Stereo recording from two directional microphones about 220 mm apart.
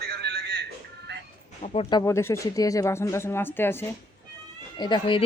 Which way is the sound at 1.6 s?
25° left (ahead or behind).